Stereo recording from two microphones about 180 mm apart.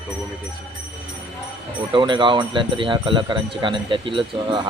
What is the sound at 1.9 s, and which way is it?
A man's voice, 25° right (ahead or behind).